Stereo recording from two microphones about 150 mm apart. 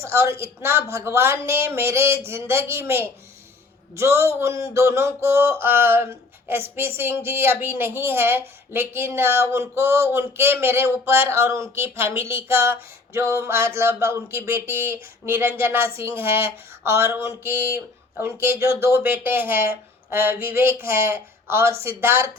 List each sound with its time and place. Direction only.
0.0 s speech: 20° right (ahead or behind)